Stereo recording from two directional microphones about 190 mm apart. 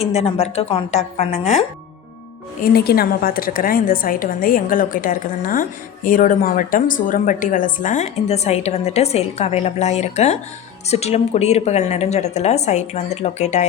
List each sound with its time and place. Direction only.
0.0 s a woman's voice: 30° left (ahead or behind)
2.6 s a woman's voice: 55° left (ahead or behind); by 13.7 s 35° left (ahead or behind)